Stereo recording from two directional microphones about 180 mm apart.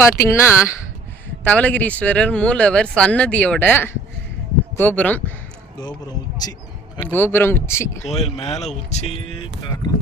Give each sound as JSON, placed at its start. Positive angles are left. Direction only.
{"t": 0.0, "sound": "speech", "side_deg": 15}
{"t": 6.4, "sound": "speech", "side_deg": 20}
{"t": 7.0, "sound": "speech", "side_deg": 10}
{"t": 8.1, "sound": "speech", "side_deg": 35}